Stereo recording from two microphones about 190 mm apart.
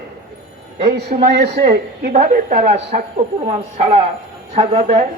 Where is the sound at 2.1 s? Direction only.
40° right (ahead or behind).